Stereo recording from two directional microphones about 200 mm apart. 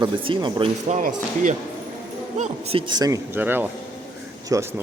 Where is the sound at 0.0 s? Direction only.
20° right (ahead or behind).